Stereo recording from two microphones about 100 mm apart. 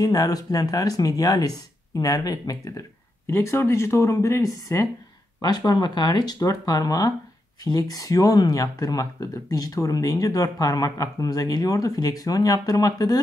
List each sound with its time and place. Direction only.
0.0 s speech: 40° left (ahead or behind)
5.7 s speech: 45° left (ahead or behind)